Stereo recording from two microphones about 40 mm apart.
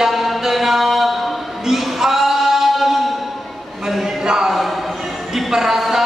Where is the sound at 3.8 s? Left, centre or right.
Centre.